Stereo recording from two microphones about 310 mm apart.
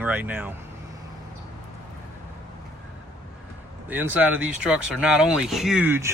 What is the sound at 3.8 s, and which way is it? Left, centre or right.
Speech, centre.